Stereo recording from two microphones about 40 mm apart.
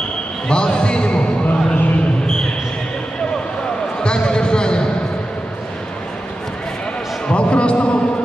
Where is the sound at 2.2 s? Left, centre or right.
Centre.